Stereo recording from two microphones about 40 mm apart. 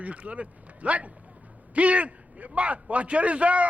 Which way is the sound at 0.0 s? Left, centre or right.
Right.